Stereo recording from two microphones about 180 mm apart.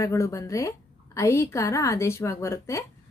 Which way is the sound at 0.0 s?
15° left (ahead or behind).